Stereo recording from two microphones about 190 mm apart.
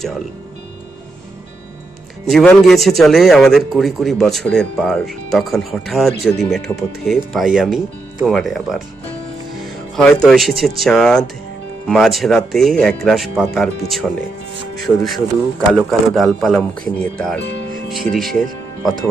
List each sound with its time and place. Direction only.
2.2 s a man's voice: 5° left (ahead or behind)